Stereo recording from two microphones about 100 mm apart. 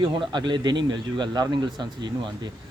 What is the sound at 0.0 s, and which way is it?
A man's voice, 50° right (ahead or behind).